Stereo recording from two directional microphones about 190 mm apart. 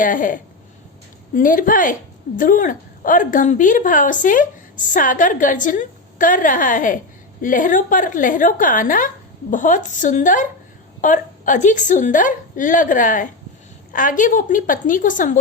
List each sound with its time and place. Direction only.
0.0 s a woman's voice: 45° left (ahead or behind)